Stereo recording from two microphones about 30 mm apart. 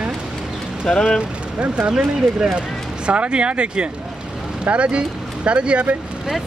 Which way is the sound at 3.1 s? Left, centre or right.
Right.